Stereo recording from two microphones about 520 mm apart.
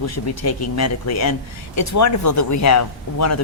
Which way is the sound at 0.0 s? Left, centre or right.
Left.